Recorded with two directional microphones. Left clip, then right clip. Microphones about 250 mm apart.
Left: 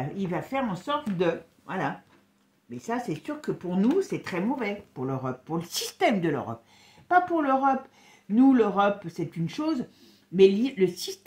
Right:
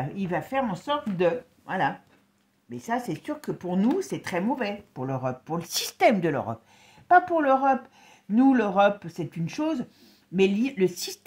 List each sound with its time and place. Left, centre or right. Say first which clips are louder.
0.1 s speech: right 3 dB; right